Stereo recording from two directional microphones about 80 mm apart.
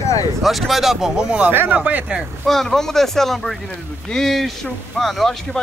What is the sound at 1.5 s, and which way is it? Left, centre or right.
Speech, right.